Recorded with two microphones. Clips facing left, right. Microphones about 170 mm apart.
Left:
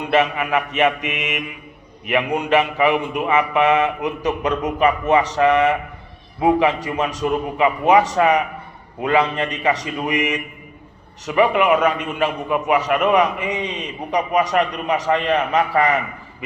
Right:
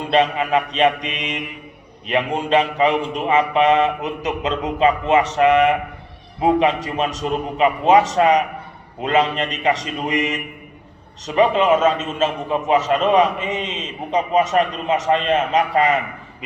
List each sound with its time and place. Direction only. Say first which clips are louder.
0.0 s a man's voice: right 1 dB; 20° right (ahead or behind)
2.1 s a man's voice: even; 25° right (ahead or behind)